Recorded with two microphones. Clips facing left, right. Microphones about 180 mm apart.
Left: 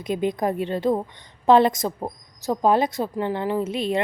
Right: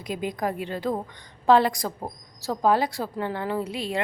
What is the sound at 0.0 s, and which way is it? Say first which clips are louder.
A woman's voice: left 5 dB; 25° left (ahead or behind).